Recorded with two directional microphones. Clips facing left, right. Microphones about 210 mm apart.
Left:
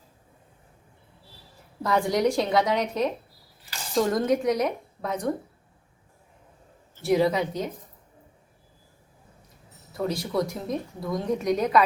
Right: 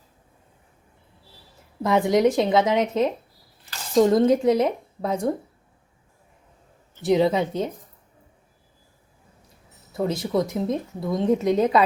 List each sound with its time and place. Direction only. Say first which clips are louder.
1.8 s speech: right 4 dB; 20° right (ahead or behind)
6.9 s speech: right 3 dB; 20° right (ahead or behind)
10.0 s speech: right 3 dB; 20° right (ahead or behind)